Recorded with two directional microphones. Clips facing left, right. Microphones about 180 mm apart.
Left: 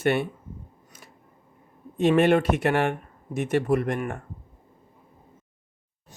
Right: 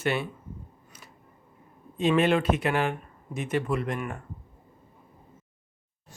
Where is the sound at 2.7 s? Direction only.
65° left (ahead or behind).